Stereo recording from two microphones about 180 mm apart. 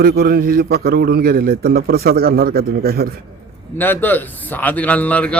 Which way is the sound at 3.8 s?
10° left (ahead or behind).